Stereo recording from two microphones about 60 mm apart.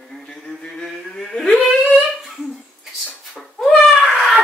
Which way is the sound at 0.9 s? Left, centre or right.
Centre.